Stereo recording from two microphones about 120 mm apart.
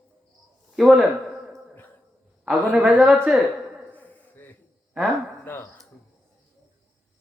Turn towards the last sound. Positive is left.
turn(degrees=15)  # may be behind; listen again after turning